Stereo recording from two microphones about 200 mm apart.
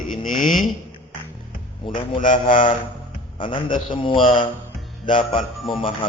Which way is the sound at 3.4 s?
25° left (ahead or behind).